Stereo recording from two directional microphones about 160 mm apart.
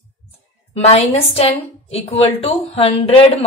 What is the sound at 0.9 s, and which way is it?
Speech, 40° left (ahead or behind).